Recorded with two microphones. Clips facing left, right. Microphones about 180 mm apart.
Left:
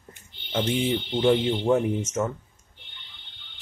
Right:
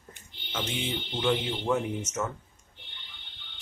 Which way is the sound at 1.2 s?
30° left (ahead or behind).